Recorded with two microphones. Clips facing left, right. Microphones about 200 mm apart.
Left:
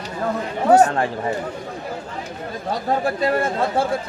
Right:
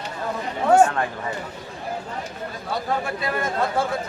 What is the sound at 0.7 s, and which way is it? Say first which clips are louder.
Speech: left 2 dB; 35° left (ahead or behind).